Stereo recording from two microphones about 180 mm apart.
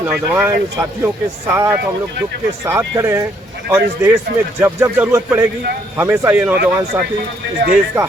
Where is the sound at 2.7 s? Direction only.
15° right (ahead or behind).